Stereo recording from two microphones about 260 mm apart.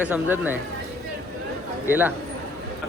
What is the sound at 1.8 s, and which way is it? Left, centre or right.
Speech, centre.